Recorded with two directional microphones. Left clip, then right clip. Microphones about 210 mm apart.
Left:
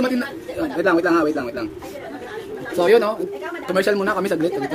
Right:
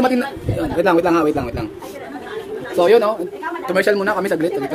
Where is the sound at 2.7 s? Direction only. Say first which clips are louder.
Right 3 dB; centre (ahead or behind).